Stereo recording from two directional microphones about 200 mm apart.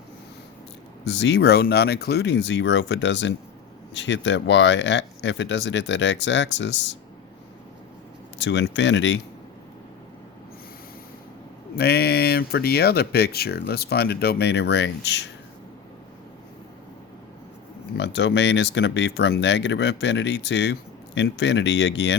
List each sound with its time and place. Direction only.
1.0 s speech: 60° left (ahead or behind)
8.4 s speech: 65° left (ahead or behind)
11.8 s speech: 50° left (ahead or behind)
17.9 s speech: 60° left (ahead or behind)